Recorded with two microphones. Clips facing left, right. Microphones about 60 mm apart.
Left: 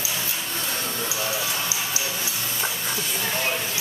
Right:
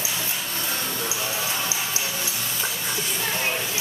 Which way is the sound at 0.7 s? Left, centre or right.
Centre.